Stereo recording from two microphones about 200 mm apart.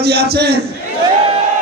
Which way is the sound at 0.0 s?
55° right (ahead or behind).